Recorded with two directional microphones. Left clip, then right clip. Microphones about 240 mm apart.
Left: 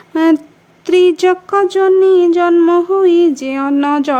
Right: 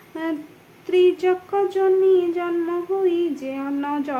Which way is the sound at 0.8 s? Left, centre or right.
Left.